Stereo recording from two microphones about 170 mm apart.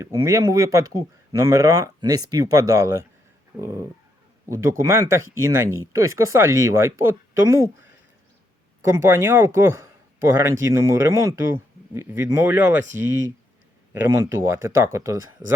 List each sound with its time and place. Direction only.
0.0 s speech: 20° right (ahead or behind)
8.8 s speech: 15° right (ahead or behind)